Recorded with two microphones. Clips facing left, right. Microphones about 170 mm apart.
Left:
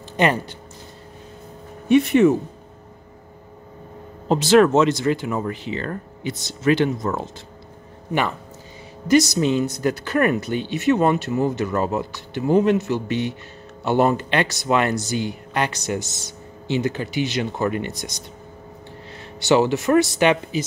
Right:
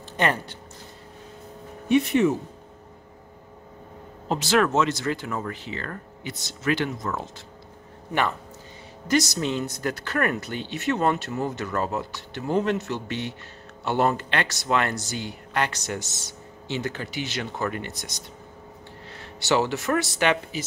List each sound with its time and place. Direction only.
0.2 s speech: 15° left (ahead or behind)
1.9 s speech: 65° left (ahead or behind)
4.3 s speech: 25° left (ahead or behind)
8.1 s speech: 10° left (ahead or behind)
19.1 s speech: 20° left (ahead or behind)